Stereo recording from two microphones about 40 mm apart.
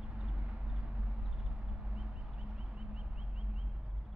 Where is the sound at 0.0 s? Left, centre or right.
Right.